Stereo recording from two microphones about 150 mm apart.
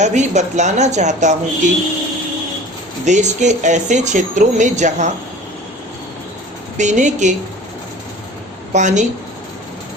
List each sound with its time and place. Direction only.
0.0 s speech: 50° right (ahead or behind)
3.0 s speech: 55° right (ahead or behind)
6.7 s speech: 55° right (ahead or behind)
8.7 s speech: 55° right (ahead or behind)